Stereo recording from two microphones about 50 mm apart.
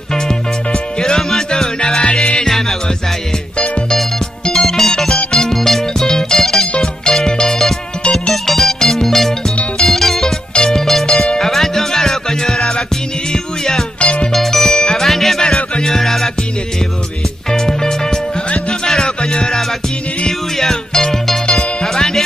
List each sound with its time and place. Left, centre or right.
0.7 s music: centre
4.5 s music: centre
14.3 s music: centre
17.5 s music: centre